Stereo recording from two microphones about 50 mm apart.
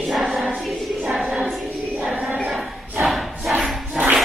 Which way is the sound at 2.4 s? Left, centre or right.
Centre.